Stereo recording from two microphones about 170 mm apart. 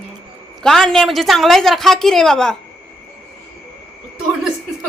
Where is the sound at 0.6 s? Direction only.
Centre (ahead or behind).